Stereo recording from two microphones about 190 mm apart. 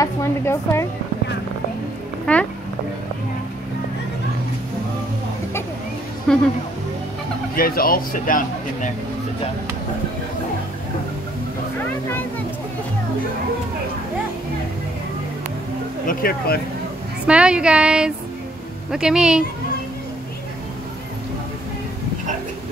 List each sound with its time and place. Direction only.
0.0 s a woman's voice: 15° left (ahead or behind)
2.3 s speech: 5° left (ahead or behind)
6.3 s speech: 5° left (ahead or behind)
7.5 s speech: 50° left (ahead or behind)
16.1 s speech: 50° left (ahead or behind)
17.3 s speech: 5° right (ahead or behind)